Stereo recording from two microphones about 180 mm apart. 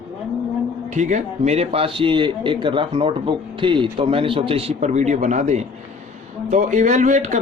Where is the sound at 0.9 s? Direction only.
40° right (ahead or behind).